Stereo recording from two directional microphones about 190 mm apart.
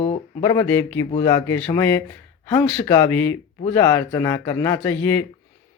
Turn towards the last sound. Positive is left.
turn(degrees=10)  # may be behind; listen again after turning